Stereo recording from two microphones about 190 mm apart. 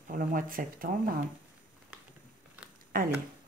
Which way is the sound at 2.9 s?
45° right (ahead or behind).